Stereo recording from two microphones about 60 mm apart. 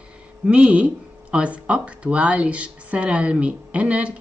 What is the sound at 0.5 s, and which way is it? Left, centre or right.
A woman's voice, right.